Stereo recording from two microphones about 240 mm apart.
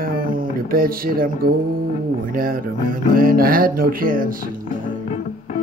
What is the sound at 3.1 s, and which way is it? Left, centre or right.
Music, right.